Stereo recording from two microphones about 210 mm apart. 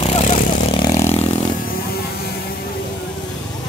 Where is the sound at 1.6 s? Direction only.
45° left (ahead or behind).